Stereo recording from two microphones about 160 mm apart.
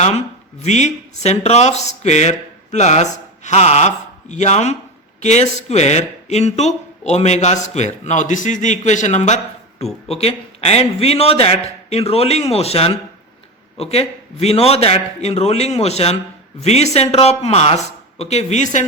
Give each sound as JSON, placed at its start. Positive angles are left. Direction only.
{"t": 0.0, "sound": "a man's voice", "side_deg": 45}